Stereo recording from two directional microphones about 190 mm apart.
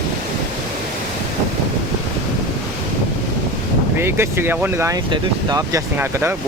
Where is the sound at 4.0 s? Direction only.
10° right (ahead or behind).